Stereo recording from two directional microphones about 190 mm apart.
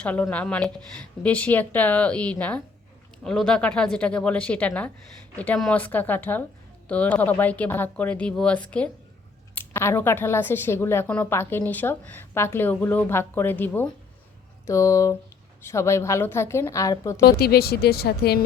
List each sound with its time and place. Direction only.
0.0 s a woman's voice: 10° left (ahead or behind)
17.2 s speech: 55° left (ahead or behind)